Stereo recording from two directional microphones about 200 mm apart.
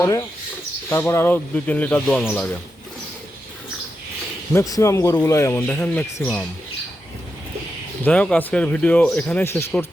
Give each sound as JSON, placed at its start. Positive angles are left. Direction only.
{"t": 0.0, "sound": "a man's voice", "side_deg": 15}
{"t": 4.5, "sound": "a man's voice", "side_deg": 15}
{"t": 8.0, "sound": "a man's voice", "side_deg": 5}